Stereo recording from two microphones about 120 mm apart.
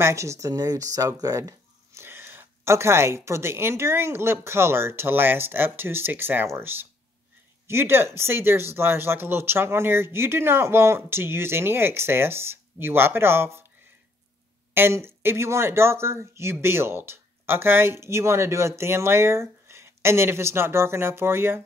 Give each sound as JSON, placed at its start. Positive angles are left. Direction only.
{"t": 0.0, "sound": "speech", "side_deg": -25}
{"t": 2.0, "sound": "speech", "side_deg": -20}
{"t": 14.7, "sound": "speech", "side_deg": -20}